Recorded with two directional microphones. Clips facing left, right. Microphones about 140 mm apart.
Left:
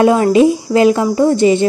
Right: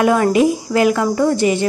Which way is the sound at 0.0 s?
25° left (ahead or behind).